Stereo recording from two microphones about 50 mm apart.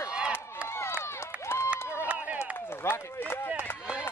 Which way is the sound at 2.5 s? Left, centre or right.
Left.